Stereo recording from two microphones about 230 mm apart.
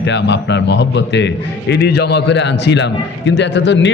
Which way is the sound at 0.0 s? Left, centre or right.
Left.